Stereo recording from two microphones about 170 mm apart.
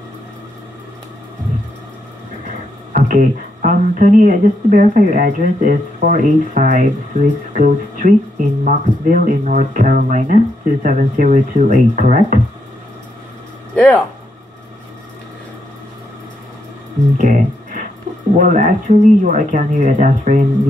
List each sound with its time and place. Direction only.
2.9 s speech: 50° right (ahead or behind)
13.7 s speech: 5° left (ahead or behind)
17.2 s music: 50° right (ahead or behind)
18.4 s speech: 50° right (ahead or behind)